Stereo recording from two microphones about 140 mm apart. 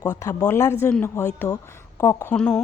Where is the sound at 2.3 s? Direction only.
5° left (ahead or behind).